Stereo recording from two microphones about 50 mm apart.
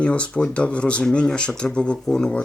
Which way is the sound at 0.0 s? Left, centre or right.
Left.